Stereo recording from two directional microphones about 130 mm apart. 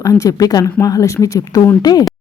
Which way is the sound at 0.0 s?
25° left (ahead or behind).